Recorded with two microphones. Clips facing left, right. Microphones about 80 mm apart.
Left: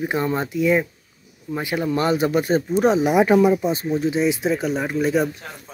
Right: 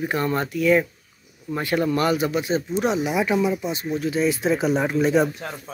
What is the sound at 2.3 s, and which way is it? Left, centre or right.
Speech, left.